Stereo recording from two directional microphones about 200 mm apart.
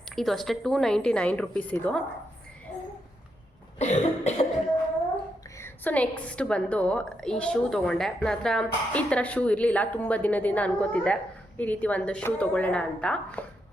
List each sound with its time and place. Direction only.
0.2 s a woman's voice: centre (ahead or behind)
3.8 s cough: 35° left (ahead or behind)
5.5 s a woman's voice: 10° left (ahead or behind)